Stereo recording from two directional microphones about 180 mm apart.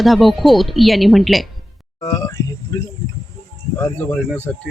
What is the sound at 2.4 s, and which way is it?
Speech, 15° left (ahead or behind).